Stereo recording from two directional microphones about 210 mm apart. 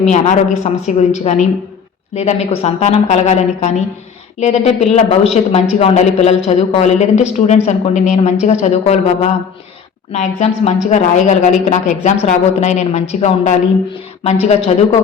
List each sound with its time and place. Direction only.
0.0 s speech: 35° left (ahead or behind)